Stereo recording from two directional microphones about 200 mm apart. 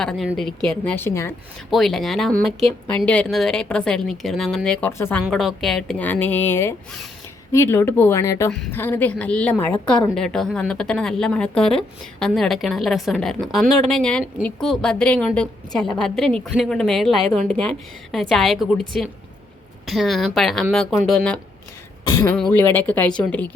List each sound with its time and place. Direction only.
0.0 s a woman's voice: centre (ahead or behind)
1.7 s a woman's voice: centre (ahead or behind)
5.3 s a woman's voice: centre (ahead or behind)
22.1 s a woman's voice: 15° left (ahead or behind)
22.4 s a woman's voice: 5° left (ahead or behind)